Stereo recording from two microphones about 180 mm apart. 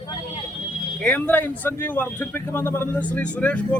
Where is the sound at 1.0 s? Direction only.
5° left (ahead or behind).